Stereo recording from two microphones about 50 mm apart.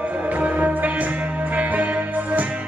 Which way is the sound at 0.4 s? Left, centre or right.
Right.